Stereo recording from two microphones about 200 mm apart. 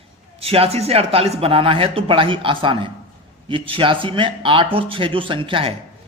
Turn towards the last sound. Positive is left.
turn(degrees=-25)  # may be behind; listen again after turning